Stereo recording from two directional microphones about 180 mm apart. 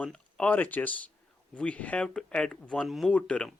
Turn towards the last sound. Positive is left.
turn(degrees=5)  # may be behind; listen again after turning